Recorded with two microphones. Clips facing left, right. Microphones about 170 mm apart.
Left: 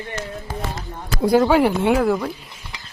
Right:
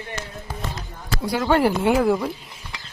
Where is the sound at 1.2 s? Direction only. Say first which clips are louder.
Left 10 dB; 50° left (ahead or behind).